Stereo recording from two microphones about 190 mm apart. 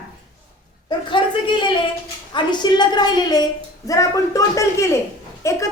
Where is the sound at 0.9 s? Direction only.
25° left (ahead or behind).